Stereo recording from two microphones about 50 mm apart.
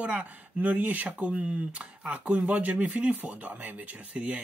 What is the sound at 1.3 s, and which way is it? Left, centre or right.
Speech, centre.